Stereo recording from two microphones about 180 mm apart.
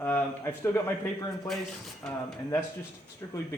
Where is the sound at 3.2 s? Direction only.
15° left (ahead or behind).